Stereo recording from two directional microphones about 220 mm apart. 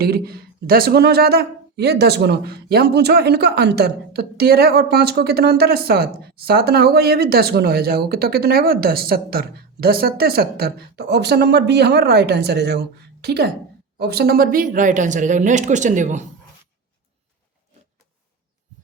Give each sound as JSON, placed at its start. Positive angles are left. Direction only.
{"t": 0.0, "sound": "speech", "side_deg": -45}